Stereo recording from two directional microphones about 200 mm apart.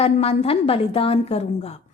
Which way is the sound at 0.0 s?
30° left (ahead or behind).